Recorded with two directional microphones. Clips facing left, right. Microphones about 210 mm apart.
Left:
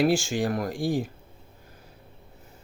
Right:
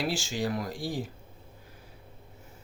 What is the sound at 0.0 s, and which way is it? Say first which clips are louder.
Speech: left 7 dB; 50° left (ahead or behind).